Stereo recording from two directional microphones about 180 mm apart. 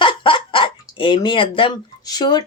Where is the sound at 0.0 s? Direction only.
30° left (ahead or behind).